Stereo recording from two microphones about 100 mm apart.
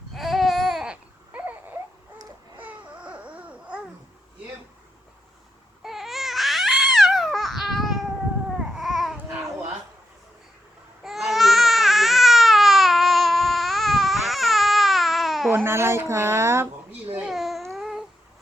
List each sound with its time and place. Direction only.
0.1 s baby cry: centre (ahead or behind)
2.6 s baby cry: 15° right (ahead or behind)
5.8 s babbling: centre (ahead or behind)
11.0 s baby cry: centre (ahead or behind)
15.5 s a sound: 25° right (ahead or behind)
17.2 s babbling: centre (ahead or behind)
17.7 s a sound: 5° right (ahead or behind)